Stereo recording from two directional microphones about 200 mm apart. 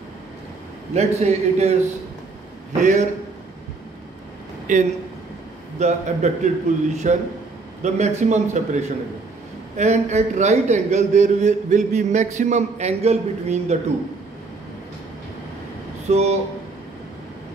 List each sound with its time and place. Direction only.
0.9 s a man's voice: 35° right (ahead or behind)
2.8 s a man's voice: 40° right (ahead or behind)
4.7 s a man's voice: 40° right (ahead or behind)
16.1 s a man's voice: 35° right (ahead or behind)